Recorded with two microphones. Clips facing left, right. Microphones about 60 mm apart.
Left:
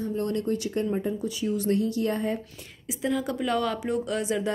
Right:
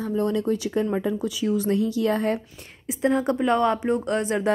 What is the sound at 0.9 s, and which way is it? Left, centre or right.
A woman's voice, right.